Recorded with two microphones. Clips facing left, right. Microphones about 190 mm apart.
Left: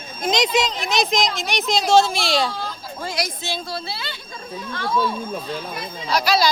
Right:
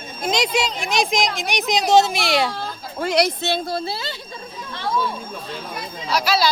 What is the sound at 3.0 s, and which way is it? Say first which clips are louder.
Speech: right 8 dB; 65° right (ahead or behind).